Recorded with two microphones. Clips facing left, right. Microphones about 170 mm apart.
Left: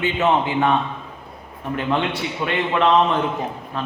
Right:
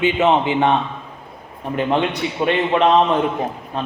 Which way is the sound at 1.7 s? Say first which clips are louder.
Right 3 dB; 20° right (ahead or behind).